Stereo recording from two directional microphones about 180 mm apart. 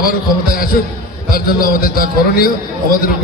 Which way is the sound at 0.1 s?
55° left (ahead or behind).